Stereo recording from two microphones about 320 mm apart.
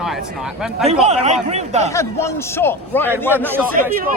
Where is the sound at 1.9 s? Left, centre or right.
Centre.